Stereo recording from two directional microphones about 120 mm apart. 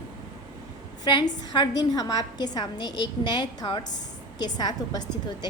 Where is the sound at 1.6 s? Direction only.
35° left (ahead or behind).